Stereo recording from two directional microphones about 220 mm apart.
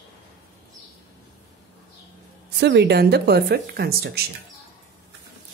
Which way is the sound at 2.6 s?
50° right (ahead or behind).